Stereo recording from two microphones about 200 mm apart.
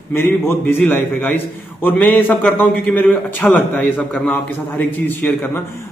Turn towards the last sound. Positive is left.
turn(degrees=10)  # may be behind; listen again after turning